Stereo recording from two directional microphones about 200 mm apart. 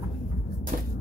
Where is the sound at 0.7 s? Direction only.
45° right (ahead or behind).